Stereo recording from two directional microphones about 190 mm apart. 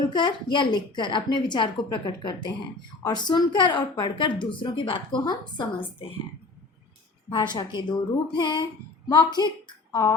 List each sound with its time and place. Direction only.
0.1 s a woman's voice: 25° left (ahead or behind)
7.3 s a woman's voice: 25° left (ahead or behind)